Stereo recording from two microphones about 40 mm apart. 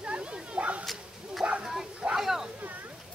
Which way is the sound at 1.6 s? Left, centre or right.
Centre.